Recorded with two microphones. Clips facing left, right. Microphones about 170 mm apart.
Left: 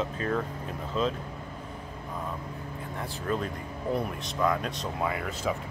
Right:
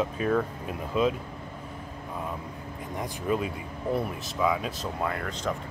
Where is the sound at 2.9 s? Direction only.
10° right (ahead or behind).